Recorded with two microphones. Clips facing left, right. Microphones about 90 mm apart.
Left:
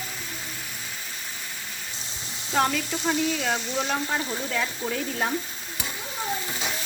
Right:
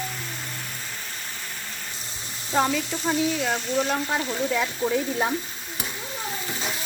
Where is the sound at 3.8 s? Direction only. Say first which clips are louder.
Right 2 dB; 5° right (ahead or behind).